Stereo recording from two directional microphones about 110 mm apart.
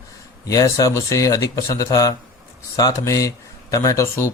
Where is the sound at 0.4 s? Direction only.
30° left (ahead or behind).